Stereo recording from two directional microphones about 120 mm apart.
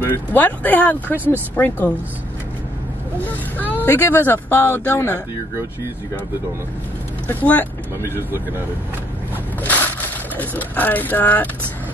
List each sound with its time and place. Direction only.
0.1 s speech: 15° left (ahead or behind)
3.3 s speech: 15° left (ahead or behind)
7.3 s speech: 15° left (ahead or behind)
9.6 s speech: 15° left (ahead or behind)